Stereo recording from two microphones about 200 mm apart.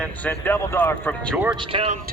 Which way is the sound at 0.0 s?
10° left (ahead or behind).